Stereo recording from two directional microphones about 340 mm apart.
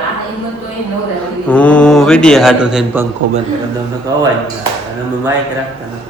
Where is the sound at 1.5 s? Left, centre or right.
Centre.